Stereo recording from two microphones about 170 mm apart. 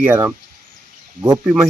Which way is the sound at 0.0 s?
10° right (ahead or behind).